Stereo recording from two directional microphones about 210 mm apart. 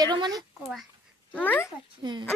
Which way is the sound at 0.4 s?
Centre (ahead or behind).